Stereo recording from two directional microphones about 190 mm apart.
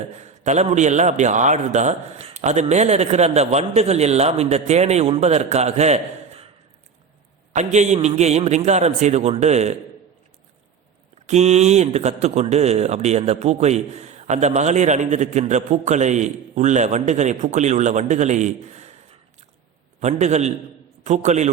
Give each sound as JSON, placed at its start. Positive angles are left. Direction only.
{"t": 0.2, "sound": "speech", "side_deg": -35}
{"t": 7.5, "sound": "speech", "side_deg": -35}
{"t": 11.3, "sound": "speech", "side_deg": -35}
{"t": 20.0, "sound": "speech", "side_deg": -35}